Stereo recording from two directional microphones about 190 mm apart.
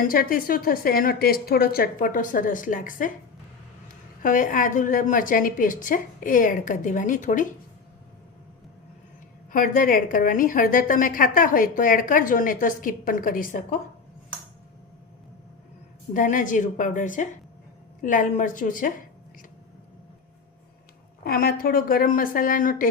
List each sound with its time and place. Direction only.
0.1 s a woman's voice: 50° left (ahead or behind)
4.2 s a woman's voice: 45° left (ahead or behind)
9.5 s a woman's voice: 45° left (ahead or behind)
16.1 s a woman's voice: 45° left (ahead or behind)
21.2 s a woman's voice: 50° left (ahead or behind)